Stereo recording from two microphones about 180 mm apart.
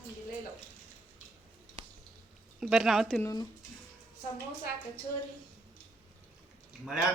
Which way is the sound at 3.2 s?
15° left (ahead or behind).